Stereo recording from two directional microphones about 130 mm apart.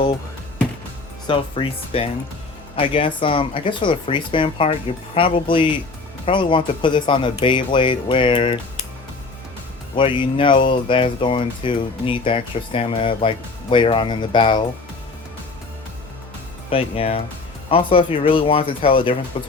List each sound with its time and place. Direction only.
1.3 s speech: 40° left (ahead or behind)
9.9 s speech: 40° left (ahead or behind)
16.6 s speech: 45° left (ahead or behind)